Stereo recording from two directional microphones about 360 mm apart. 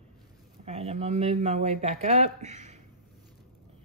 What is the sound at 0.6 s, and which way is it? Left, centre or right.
Speech, centre.